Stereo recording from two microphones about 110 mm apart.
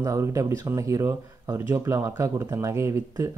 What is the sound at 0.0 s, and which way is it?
Speech, 30° right (ahead or behind).